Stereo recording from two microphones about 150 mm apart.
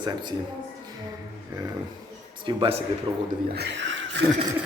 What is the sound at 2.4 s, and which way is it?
Speech, 35° right (ahead or behind).